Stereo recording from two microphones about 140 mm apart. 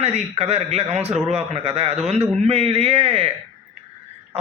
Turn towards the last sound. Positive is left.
turn(degrees=-45)  # may be behind; listen again after turning